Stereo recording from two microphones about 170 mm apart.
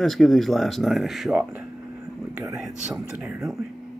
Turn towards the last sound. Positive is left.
turn(degrees=-5)  # may be behind; listen again after turning